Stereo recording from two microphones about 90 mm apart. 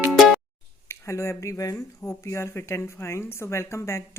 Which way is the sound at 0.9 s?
30° left (ahead or behind).